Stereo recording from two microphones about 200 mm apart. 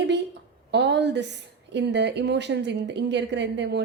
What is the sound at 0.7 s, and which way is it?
A woman's voice, 60° right (ahead or behind).